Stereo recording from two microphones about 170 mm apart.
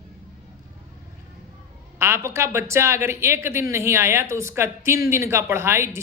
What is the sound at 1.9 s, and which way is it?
Speech, 15° right (ahead or behind).